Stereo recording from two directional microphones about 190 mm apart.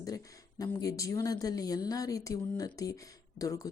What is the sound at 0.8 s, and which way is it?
A woman's voice, 20° left (ahead or behind).